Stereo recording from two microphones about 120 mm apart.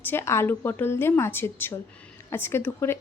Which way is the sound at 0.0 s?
20° left (ahead or behind).